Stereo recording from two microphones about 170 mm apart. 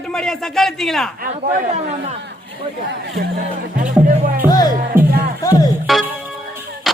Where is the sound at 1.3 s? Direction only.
40° right (ahead or behind).